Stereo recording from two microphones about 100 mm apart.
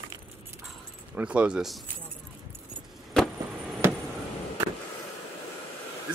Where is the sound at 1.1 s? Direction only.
10° right (ahead or behind).